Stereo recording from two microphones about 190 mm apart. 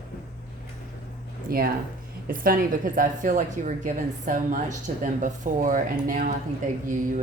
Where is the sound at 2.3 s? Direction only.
50° right (ahead or behind).